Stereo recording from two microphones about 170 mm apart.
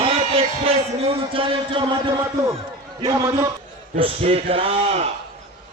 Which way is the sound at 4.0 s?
35° right (ahead or behind).